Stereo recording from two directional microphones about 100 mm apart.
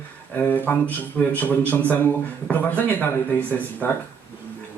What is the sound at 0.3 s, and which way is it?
A man's voice, 20° left (ahead or behind).